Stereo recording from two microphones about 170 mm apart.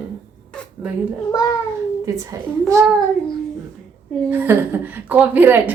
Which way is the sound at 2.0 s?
20° right (ahead or behind).